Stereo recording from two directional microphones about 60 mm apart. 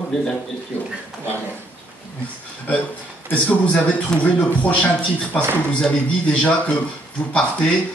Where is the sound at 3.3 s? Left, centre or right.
Left.